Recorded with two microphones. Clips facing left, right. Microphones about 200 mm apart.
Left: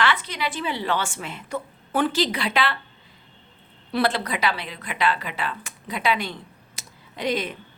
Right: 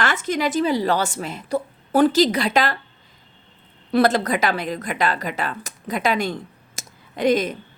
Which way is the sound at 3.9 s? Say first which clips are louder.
Right 6 dB; 45° right (ahead or behind).